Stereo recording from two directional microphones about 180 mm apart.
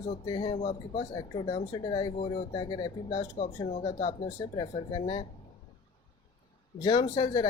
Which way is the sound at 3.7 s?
40° left (ahead or behind).